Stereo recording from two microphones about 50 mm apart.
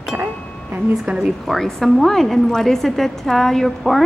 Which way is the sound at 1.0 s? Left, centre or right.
Centre.